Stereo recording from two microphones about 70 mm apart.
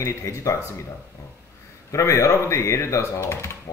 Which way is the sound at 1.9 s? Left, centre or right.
Left.